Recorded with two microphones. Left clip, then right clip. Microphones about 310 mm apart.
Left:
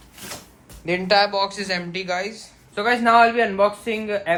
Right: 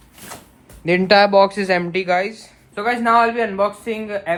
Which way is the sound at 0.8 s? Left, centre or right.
Right.